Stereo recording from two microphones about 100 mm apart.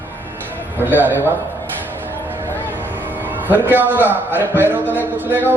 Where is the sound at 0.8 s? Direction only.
20° right (ahead or behind).